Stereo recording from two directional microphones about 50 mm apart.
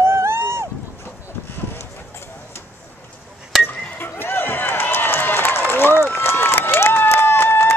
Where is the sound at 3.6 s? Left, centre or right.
Left.